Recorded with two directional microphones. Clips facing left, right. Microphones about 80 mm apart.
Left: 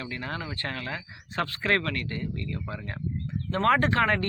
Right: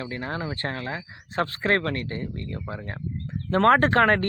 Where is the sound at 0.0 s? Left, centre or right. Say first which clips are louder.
Right 4 dB; right.